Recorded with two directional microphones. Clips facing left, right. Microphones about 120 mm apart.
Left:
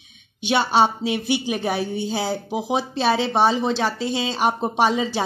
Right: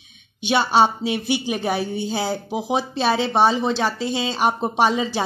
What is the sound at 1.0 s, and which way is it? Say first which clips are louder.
Speech: even; 35° right (ahead or behind).